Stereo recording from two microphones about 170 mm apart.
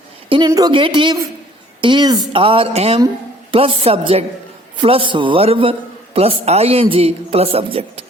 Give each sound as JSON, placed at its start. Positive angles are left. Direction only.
{"t": 0.3, "sound": "a woman's voice", "side_deg": -25}